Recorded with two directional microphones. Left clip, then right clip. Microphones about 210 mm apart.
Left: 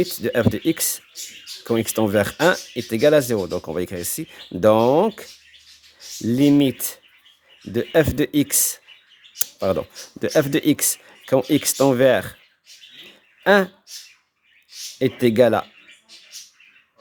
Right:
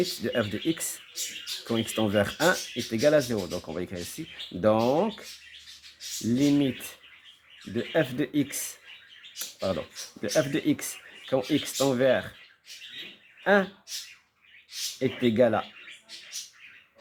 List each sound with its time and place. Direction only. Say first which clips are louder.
0.0 s speech: left 7 dB; 45° left (ahead or behind)
6.3 s speech: left 8 dB; 50° left (ahead or behind)
13.4 s speech: left 7 dB; 50° left (ahead or behind)
14.9 s speech: left 8 dB; 50° left (ahead or behind)